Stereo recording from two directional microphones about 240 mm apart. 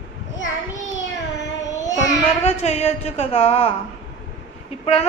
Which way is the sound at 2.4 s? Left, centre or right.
Left.